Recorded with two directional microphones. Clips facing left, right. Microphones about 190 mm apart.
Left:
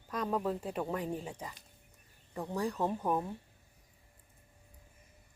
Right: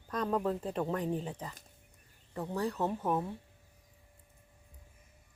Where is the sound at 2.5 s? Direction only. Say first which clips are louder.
Even; 15° left (ahead or behind).